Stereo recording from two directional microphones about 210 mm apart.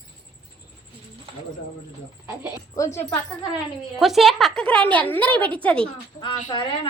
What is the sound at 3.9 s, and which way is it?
A woman's voice, centre (ahead or behind).